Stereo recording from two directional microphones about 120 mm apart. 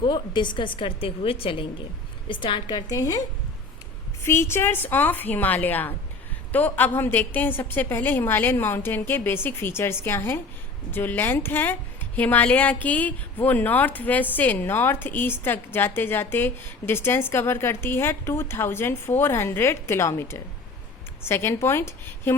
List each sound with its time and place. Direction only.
0.0 s a woman's voice: 40° left (ahead or behind); by 22.4 s 20° left (ahead or behind)